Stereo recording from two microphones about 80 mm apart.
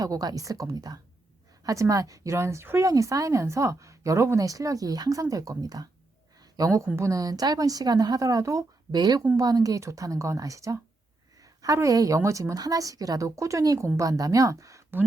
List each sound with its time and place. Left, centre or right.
0.0 s speech: right
6.4 s a sound: right
6.9 s speech: right
9.0 s speech: right